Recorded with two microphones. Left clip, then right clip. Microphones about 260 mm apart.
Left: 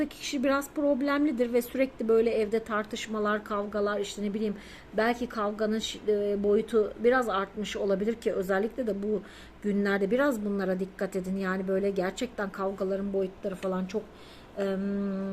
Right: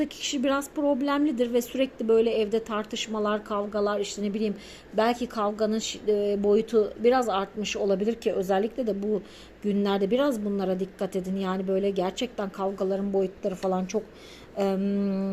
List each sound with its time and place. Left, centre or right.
0.0 s a woman's voice: centre